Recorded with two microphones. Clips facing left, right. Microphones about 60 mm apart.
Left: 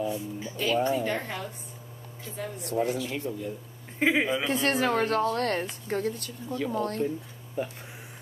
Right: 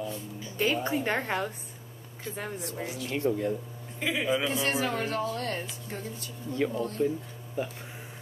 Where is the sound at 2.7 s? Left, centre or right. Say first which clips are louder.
Left 9 dB; left.